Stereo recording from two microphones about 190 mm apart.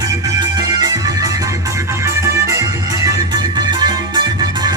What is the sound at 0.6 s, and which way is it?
Music, 20° right (ahead or behind).